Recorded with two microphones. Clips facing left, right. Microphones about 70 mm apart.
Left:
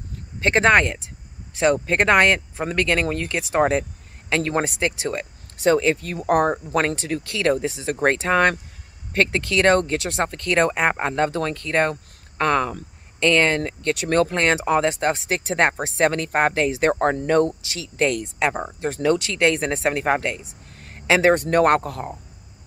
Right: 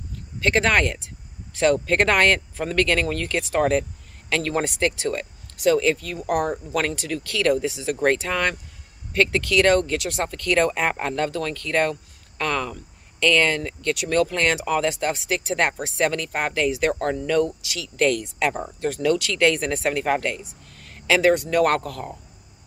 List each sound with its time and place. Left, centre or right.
0.4 s speech: left
21.6 s speech: left